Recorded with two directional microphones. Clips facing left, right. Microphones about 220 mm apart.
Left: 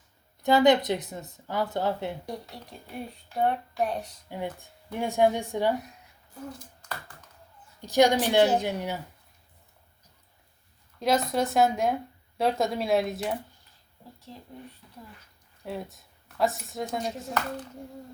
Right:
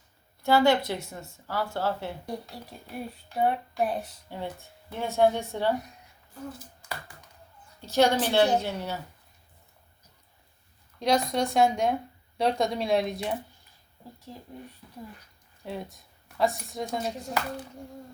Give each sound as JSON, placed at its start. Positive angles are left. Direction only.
{"t": 0.4, "sound": "speech", "side_deg": 20}
{"t": 2.2, "sound": "speech", "side_deg": 0}
{"t": 4.5, "sound": "speech", "side_deg": 15}
{"t": 6.5, "sound": "a sound", "side_deg": -5}
{"t": 7.8, "sound": "speech", "side_deg": 15}
{"t": 11.0, "sound": "speech", "side_deg": 5}
{"t": 15.6, "sound": "speech", "side_deg": 0}